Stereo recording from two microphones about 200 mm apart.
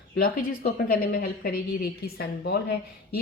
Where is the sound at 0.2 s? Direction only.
50° left (ahead or behind).